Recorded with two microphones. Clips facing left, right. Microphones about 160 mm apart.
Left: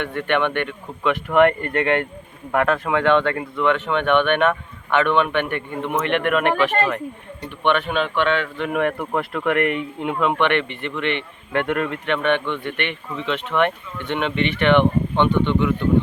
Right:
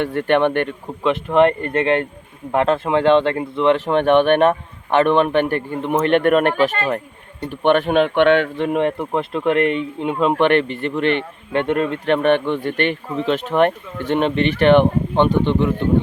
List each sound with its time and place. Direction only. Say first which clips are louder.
0.0 s speech: right 5 dB; 35° right (ahead or behind)
1.1 s speech: right 1 dB; 25° right (ahead or behind); by 8.4 s 60° right (ahead or behind)
8.5 s speech: right 3 dB; 30° right (ahead or behind)
10.2 s speech: right 5 dB; 35° right (ahead or behind)
11.5 s speech: right 3 dB; 25° right (ahead or behind)
12.0 s speech: right 6 dB; 40° right (ahead or behind)